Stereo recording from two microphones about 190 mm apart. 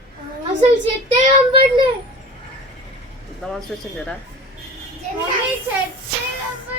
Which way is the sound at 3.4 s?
5° left (ahead or behind).